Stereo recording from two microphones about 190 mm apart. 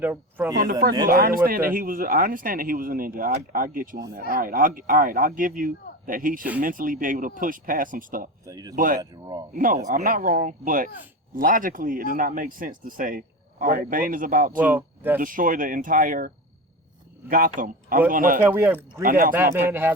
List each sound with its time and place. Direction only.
0.0 s speech: 10° right (ahead or behind)
0.6 s speech: 50° right (ahead or behind)
8.4 s speech: 20° right (ahead or behind)
8.7 s speech: 45° right (ahead or behind)
9.0 s speech: 20° right (ahead or behind)
9.5 s speech: 45° right (ahead or behind)
14.6 s speech: 10° right (ahead or behind)
15.2 s speech: 45° right (ahead or behind)
18.4 s speech: 10° right (ahead or behind)
19.0 s speech: 50° right (ahead or behind)
19.5 s speech: 10° right (ahead or behind)